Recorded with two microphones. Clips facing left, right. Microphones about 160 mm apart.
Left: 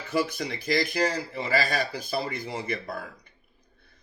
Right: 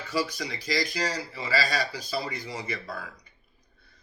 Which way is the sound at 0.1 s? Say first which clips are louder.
Left 3 dB; 55° left (ahead or behind).